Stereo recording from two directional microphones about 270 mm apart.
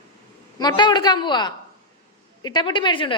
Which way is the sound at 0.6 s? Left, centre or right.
Centre.